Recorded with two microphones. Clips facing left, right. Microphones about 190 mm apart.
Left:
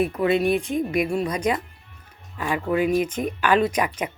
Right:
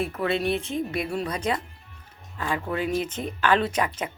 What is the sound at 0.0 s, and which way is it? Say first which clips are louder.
Speech: left 5 dB; 15° left (ahead or behind).